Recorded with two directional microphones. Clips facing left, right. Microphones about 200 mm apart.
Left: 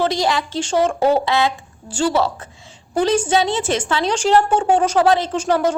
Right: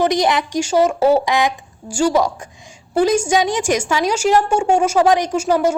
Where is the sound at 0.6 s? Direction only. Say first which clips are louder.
Right 2 dB; 10° right (ahead or behind).